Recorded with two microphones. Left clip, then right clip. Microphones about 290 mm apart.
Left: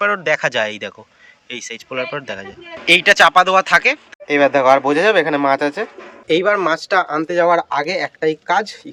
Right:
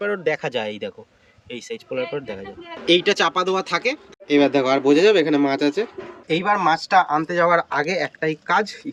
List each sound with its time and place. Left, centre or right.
0.0 s speech: centre
1.9 s speech: left
2.8 s speech: centre
7.3 s speech: left